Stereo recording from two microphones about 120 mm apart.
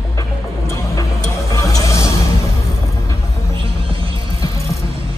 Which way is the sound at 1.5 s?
30° left (ahead or behind).